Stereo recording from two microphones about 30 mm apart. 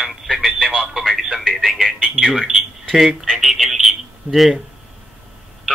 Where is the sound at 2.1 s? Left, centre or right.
Centre.